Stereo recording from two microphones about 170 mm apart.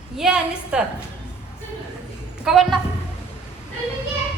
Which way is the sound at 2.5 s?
5° right (ahead or behind).